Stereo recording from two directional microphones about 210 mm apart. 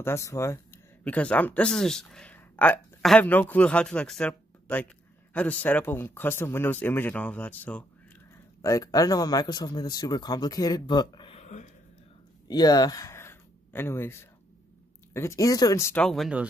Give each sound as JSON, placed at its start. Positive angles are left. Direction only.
{"t": 0.0, "sound": "speech", "side_deg": 15}
{"t": 12.4, "sound": "a sound", "side_deg": 20}
{"t": 15.1, "sound": "speech", "side_deg": 15}